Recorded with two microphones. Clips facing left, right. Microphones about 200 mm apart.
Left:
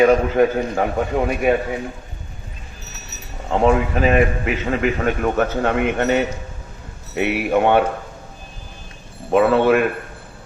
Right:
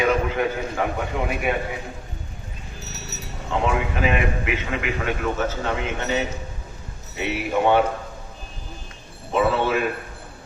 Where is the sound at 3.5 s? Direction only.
40° left (ahead or behind).